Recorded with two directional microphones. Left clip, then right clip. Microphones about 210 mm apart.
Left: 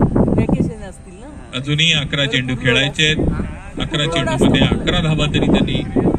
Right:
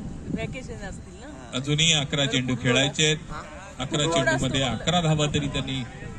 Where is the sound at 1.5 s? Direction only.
50° right (ahead or behind).